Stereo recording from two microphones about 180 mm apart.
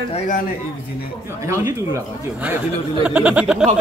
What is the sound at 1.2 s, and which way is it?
Speech, 15° right (ahead or behind).